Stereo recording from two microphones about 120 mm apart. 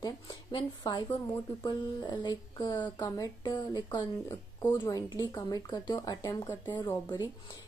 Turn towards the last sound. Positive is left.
turn(degrees=35)  # may be behind; listen again after turning